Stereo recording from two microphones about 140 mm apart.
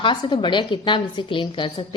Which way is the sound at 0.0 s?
35° left (ahead or behind).